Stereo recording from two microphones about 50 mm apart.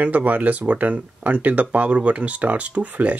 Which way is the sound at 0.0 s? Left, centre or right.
Right.